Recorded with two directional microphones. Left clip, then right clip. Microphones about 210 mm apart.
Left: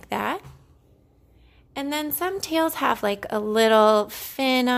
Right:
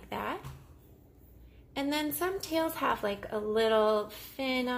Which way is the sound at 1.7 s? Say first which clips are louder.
Left 5 dB; 30° left (ahead or behind).